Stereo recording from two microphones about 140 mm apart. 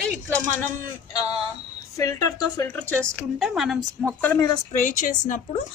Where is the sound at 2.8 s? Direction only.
10° left (ahead or behind).